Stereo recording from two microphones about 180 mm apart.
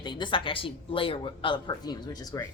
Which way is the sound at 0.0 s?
25° left (ahead or behind).